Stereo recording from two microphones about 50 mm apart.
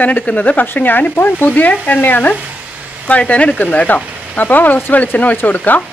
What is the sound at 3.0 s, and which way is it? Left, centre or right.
Speech, left.